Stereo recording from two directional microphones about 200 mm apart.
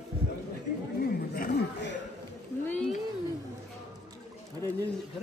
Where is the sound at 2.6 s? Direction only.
5° left (ahead or behind).